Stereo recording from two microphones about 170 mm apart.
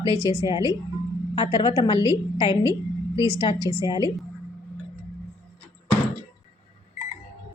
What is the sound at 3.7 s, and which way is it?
Speech, 25° left (ahead or behind).